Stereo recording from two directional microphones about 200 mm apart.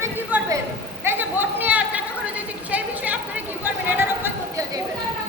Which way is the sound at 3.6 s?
10° right (ahead or behind).